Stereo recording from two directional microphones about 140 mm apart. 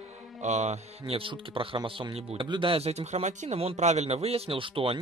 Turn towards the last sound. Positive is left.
turn(degrees=-40)  # may be behind; listen again after turning